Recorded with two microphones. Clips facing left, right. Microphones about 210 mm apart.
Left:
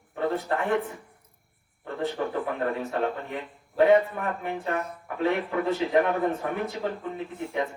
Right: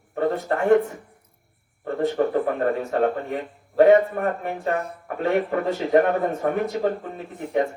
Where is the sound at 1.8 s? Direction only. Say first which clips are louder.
Right 7 dB; 45° right (ahead or behind).